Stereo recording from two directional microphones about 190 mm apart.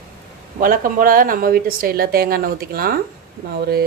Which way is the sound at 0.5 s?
45° right (ahead or behind).